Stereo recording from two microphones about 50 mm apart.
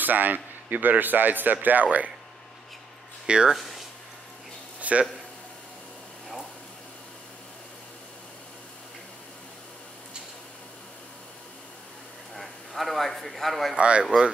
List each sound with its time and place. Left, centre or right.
0.0 s a man's voice: right
3.3 s speech: centre
3.5 s a sound: centre
4.7 s a sound: right
12.4 s speech: centre
13.7 s speech: right